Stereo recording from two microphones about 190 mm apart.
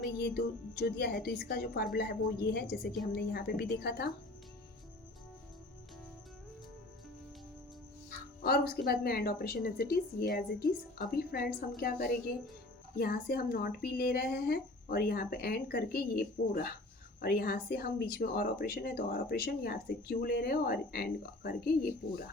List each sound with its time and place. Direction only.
0.2 s a woman's voice: 55° left (ahead or behind)
8.4 s a woman's voice: 55° left (ahead or behind)